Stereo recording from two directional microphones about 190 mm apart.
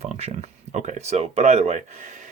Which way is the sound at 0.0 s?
35° right (ahead or behind).